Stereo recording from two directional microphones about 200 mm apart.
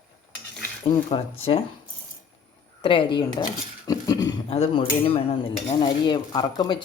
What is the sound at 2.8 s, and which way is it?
Speech, 25° left (ahead or behind).